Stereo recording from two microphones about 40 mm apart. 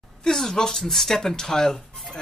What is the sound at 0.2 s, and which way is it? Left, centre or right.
Speech, centre.